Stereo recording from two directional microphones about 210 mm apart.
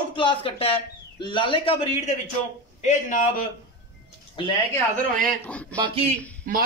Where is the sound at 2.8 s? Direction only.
35° left (ahead or behind).